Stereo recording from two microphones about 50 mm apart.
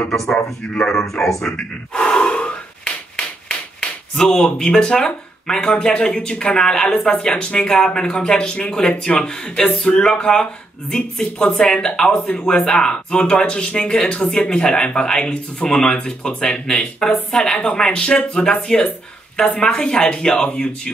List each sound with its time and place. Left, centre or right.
0.8 s speech: centre